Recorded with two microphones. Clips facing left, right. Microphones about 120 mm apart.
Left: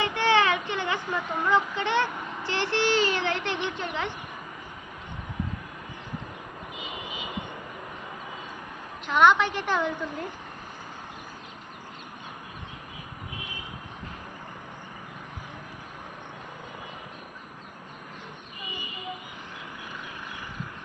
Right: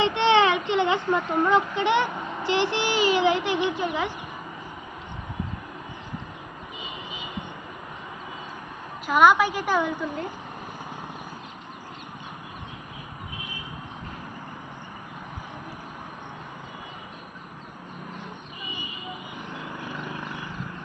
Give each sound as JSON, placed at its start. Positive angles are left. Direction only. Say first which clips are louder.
{"t": 0.0, "sound": "a sound", "louder": "right 4 dB", "side_deg": -20}
{"t": 1.3, "sound": "speech", "louder": "right 2 dB", "side_deg": -15}
{"t": 9.0, "sound": "speech", "louder": "right 2 dB", "side_deg": -5}